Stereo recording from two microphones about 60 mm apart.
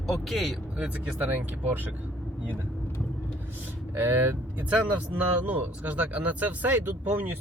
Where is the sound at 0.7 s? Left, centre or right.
Right.